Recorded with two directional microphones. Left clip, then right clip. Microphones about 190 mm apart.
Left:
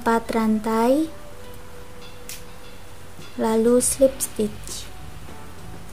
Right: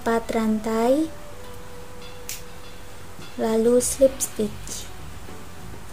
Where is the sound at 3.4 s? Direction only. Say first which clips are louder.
Left 1 dB; 15° left (ahead or behind).